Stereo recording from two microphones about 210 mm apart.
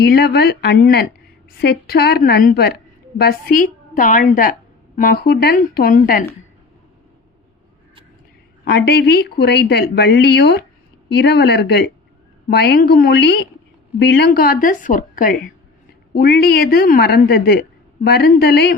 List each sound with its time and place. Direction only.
0.0 s a woman's voice: 50° left (ahead or behind)
8.6 s a woman's voice: 55° left (ahead or behind)